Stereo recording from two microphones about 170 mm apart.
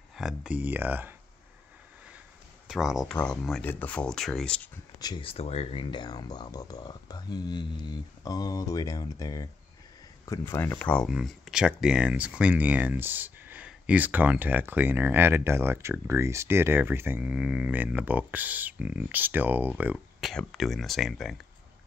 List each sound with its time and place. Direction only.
0.1 s speech: 5° right (ahead or behind)
2.7 s speech: 5° right (ahead or behind)
5.0 s speech: 30° left (ahead or behind); by 20.2 s 10° right (ahead or behind)
20.2 s speech: centre (ahead or behind)